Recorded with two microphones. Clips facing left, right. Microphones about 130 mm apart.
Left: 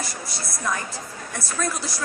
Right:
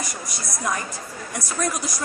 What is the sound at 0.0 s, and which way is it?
A woman's voice, 15° right (ahead or behind).